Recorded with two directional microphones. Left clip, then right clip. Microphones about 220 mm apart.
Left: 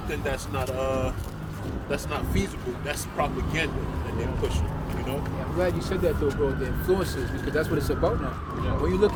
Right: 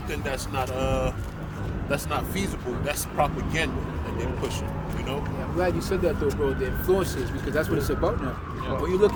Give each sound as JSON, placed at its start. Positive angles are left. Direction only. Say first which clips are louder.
{"t": 0.1, "sound": "speech", "louder": "even", "side_deg": -40}
{"t": 5.5, "sound": "speech", "louder": "right 1 dB", "side_deg": -25}